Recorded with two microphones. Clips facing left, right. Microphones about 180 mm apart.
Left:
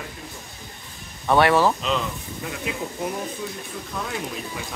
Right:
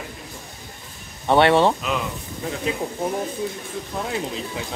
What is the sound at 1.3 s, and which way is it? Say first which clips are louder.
Speech: right 2 dB; 25° right (ahead or behind).